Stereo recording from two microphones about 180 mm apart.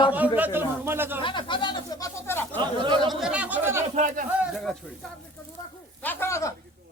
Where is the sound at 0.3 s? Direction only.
10° right (ahead or behind).